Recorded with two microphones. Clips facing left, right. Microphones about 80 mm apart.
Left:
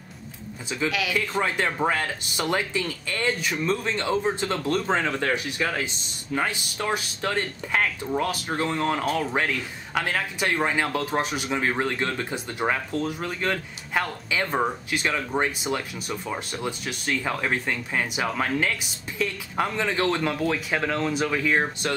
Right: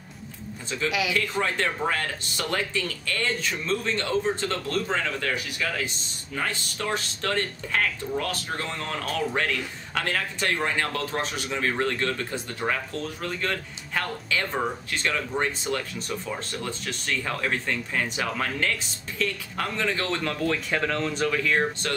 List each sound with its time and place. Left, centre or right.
1.1 s speech: centre
6.3 s speech: centre